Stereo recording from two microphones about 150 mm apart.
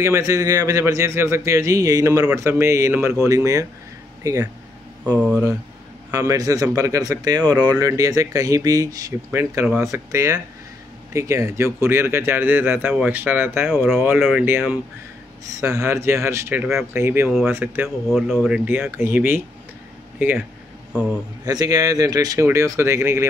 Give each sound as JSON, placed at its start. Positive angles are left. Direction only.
{"t": 0.0, "sound": "speech", "side_deg": -20}
{"t": 13.7, "sound": "speech", "side_deg": 0}
{"t": 17.8, "sound": "speech", "side_deg": 0}
{"t": 21.5, "sound": "speech", "side_deg": -25}